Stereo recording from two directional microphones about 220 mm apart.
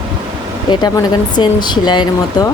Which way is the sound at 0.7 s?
20° left (ahead or behind).